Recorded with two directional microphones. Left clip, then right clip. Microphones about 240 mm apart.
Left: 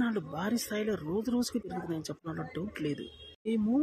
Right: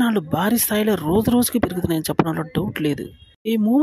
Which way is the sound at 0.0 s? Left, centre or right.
Right.